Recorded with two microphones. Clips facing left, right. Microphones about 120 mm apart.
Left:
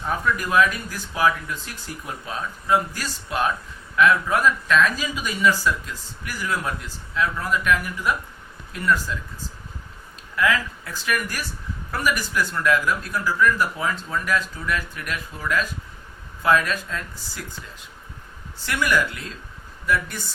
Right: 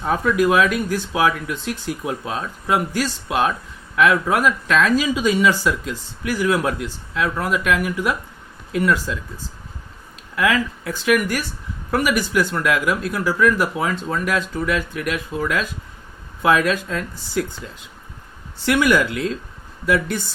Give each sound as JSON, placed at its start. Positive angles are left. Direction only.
{"t": 0.0, "sound": "speech", "side_deg": -85}
{"t": 10.3, "sound": "speech", "side_deg": -80}
{"t": 18.6, "sound": "speech", "side_deg": -75}